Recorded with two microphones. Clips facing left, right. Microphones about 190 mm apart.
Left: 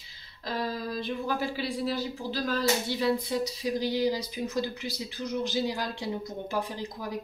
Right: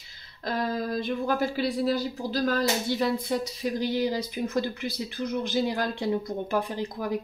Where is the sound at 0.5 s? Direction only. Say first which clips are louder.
Right 4 dB; 50° right (ahead or behind).